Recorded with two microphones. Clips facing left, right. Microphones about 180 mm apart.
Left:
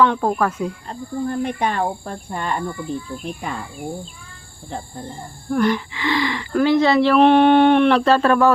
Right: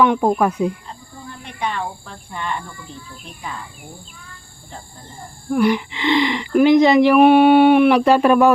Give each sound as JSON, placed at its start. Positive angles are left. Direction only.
{"t": 0.0, "sound": "speech", "side_deg": -15}
{"t": 1.2, "sound": "speech", "side_deg": 50}
{"t": 5.5, "sound": "speech", "side_deg": -10}